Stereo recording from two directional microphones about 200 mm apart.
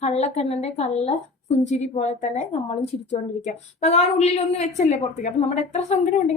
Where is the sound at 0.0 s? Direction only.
35° left (ahead or behind).